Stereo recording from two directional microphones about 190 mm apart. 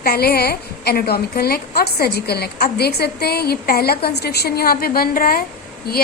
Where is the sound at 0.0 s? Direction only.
55° left (ahead or behind).